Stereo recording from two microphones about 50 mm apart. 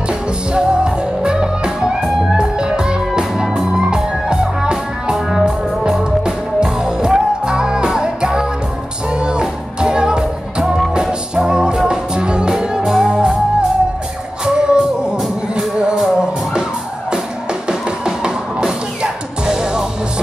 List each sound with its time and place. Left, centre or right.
0.5 s music: centre